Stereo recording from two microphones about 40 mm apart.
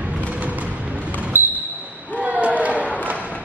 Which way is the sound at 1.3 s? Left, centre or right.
Right.